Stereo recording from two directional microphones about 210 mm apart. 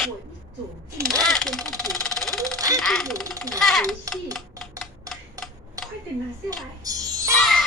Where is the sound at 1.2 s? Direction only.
Centre (ahead or behind).